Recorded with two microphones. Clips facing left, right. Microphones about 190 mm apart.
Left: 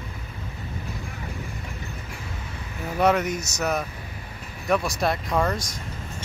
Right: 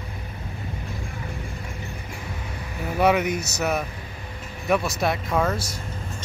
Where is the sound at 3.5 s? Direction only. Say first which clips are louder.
Right 1 dB; 5° right (ahead or behind).